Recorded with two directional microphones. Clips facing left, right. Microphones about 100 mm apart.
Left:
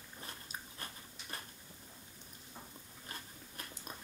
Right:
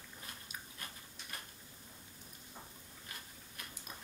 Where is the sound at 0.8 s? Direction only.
30° left (ahead or behind).